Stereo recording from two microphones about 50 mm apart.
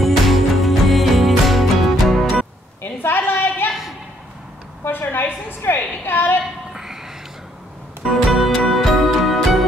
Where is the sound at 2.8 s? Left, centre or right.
Left.